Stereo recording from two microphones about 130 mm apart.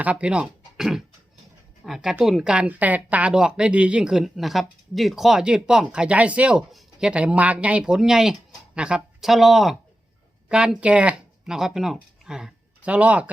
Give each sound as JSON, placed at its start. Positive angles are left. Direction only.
{"t": 0.0, "sound": "a woman's voice", "side_deg": -10}